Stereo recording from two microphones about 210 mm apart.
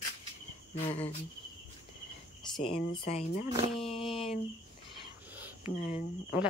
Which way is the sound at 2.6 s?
25° left (ahead or behind).